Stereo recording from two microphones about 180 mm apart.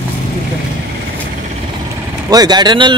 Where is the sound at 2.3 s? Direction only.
20° right (ahead or behind).